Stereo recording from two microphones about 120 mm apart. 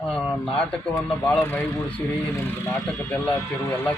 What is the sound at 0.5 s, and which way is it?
Speech, 10° left (ahead or behind).